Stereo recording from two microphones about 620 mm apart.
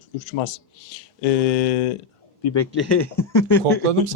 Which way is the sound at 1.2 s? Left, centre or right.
Left.